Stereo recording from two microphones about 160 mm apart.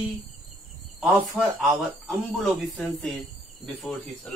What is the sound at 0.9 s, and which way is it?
Speech, centre (ahead or behind).